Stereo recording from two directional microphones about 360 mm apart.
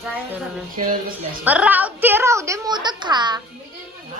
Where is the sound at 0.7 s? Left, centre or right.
Right.